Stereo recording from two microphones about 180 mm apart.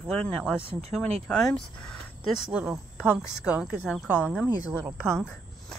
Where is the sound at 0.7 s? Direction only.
35° right (ahead or behind).